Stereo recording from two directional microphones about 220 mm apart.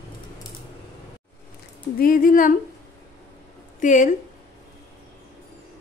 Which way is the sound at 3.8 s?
35° left (ahead or behind).